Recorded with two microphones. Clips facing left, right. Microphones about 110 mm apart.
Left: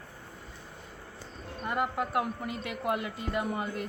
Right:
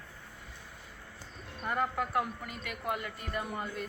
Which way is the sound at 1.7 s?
15° left (ahead or behind).